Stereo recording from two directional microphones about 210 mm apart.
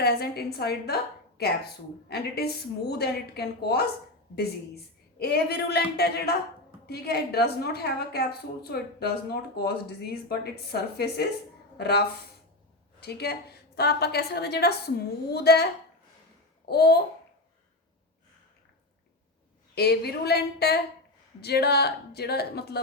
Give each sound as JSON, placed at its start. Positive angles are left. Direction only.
{"t": 0.0, "sound": "a woman's voice", "side_deg": 50}
{"t": 5.2, "sound": "a woman's voice", "side_deg": 50}
{"t": 19.7, "sound": "a woman's voice", "side_deg": 50}